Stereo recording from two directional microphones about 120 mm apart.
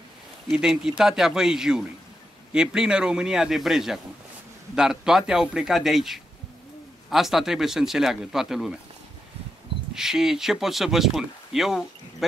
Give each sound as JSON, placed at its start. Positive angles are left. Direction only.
{"t": 0.5, "sound": "speech", "side_deg": -5}
{"t": 9.9, "sound": "speech", "side_deg": -5}